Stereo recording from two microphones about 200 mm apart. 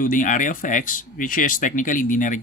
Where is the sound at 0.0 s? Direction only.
40° left (ahead or behind).